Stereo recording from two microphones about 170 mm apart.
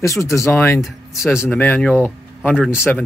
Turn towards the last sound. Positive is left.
turn(degrees=10)  # may be behind; listen again after turning